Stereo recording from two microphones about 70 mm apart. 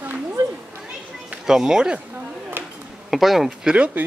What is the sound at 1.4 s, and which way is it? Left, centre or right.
Speech, centre.